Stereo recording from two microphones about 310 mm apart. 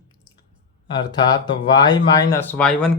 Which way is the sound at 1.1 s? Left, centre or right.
Centre.